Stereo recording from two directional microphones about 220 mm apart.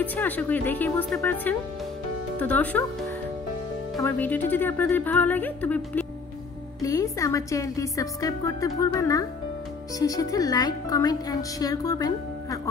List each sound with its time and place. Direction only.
0.0 s speech: 5° left (ahead or behind)
4.0 s speech: 10° left (ahead or behind)